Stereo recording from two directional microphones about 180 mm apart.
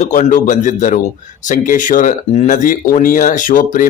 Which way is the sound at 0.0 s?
45° left (ahead or behind).